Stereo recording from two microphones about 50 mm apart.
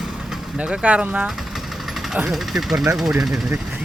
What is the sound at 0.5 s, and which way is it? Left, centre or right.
Speech, right.